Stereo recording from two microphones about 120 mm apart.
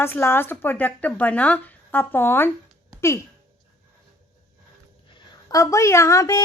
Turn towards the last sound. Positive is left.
turn(degrees=25)  # may be behind; listen again after turning